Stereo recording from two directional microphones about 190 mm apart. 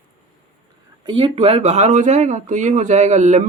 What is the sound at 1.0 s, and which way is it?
Speech, 25° right (ahead or behind).